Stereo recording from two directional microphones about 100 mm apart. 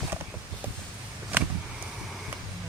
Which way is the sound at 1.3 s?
20° right (ahead or behind).